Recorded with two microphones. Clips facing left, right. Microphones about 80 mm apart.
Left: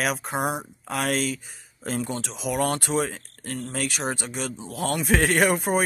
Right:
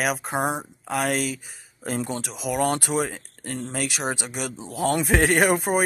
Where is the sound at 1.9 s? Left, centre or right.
Centre.